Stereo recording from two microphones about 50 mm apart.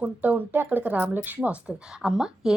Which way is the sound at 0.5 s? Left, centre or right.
Right.